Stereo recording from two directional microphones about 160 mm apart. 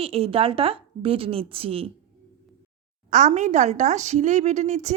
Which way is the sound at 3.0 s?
50° right (ahead or behind).